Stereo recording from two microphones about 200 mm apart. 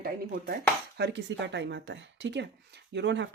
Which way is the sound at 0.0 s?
50° right (ahead or behind).